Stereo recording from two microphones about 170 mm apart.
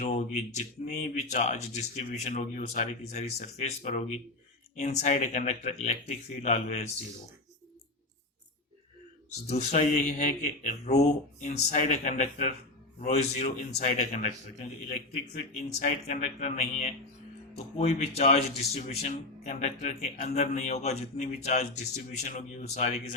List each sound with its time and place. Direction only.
0.0 s speech: 45° left (ahead or behind)
9.5 s speech: 45° left (ahead or behind)
15.7 s speech: 45° left (ahead or behind)